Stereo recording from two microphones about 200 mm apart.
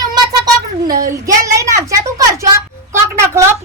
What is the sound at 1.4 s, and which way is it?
A woman's voice, 15° right (ahead or behind).